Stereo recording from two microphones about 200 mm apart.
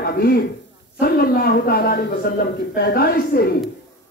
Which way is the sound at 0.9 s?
50° left (ahead or behind).